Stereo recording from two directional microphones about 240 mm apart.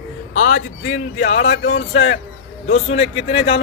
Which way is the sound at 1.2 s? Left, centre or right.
Left.